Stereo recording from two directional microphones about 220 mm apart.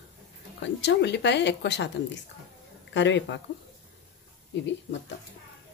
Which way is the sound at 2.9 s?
55° left (ahead or behind).